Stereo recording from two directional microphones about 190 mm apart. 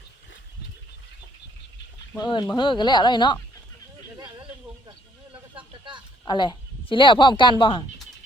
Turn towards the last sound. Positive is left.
turn(degrees=25)  # may be behind; listen again after turning